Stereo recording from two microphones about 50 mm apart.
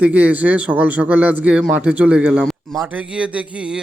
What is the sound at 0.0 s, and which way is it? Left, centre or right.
A man's voice, right.